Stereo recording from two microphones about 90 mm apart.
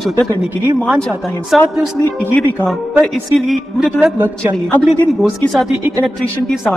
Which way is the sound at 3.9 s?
20° right (ahead or behind).